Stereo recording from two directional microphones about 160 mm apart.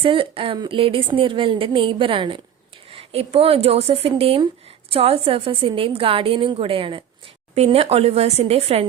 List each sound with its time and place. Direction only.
0.0 s speech: 35° right (ahead or behind)